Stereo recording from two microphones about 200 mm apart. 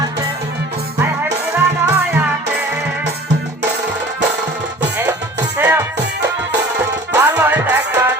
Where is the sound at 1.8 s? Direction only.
10° right (ahead or behind).